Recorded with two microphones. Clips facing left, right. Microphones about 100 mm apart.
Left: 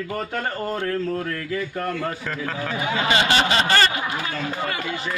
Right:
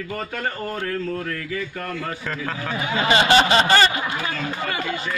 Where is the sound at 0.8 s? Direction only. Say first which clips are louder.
Even; 35° left (ahead or behind).